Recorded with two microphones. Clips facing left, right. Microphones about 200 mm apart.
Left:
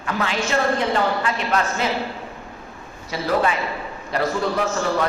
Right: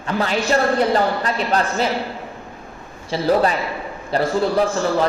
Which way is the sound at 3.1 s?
35° right (ahead or behind).